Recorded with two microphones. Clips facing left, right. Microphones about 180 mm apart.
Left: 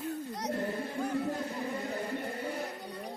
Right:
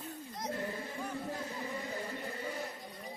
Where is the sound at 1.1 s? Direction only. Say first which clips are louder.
Left 7 dB; 65° left (ahead or behind).